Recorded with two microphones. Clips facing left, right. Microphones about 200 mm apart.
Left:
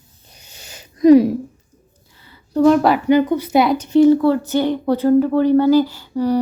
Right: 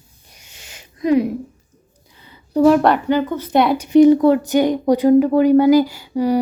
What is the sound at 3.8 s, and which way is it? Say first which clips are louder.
Speech: right 3 dB; 15° right (ahead or behind).